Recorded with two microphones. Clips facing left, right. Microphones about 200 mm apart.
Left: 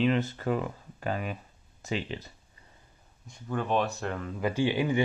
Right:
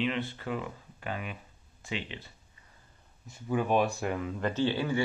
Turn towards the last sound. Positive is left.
turn(degrees=15)  # may be behind; listen again after turning